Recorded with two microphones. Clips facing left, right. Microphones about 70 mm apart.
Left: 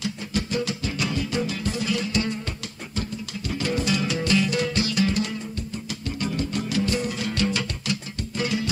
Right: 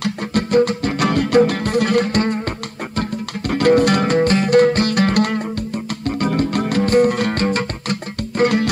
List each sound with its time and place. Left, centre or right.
0.0 s music: right